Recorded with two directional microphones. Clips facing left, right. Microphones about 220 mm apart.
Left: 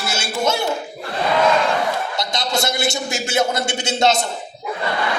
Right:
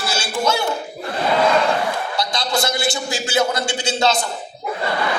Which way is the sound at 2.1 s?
25° left (ahead or behind).